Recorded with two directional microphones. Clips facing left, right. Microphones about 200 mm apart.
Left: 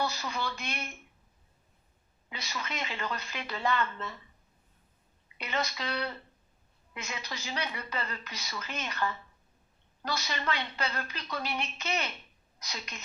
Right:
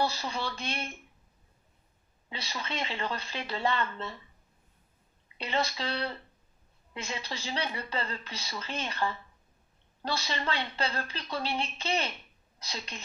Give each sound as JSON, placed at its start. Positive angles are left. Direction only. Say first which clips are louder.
{"t": 0.0, "sound": "speech", "louder": "right 2 dB", "side_deg": -30}
{"t": 2.2, "sound": "speech", "louder": "right 1 dB", "side_deg": -30}
{"t": 5.4, "sound": "a woman's voice", "louder": "right 3 dB", "side_deg": -30}